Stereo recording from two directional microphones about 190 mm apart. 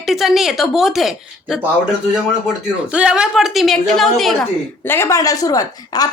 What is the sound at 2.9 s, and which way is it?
A woman's voice, 5° right (ahead or behind).